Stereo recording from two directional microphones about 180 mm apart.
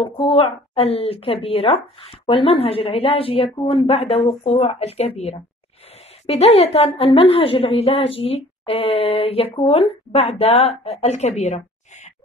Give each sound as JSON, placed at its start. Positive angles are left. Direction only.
{"t": 0.0, "sound": "a woman's voice", "side_deg": 30}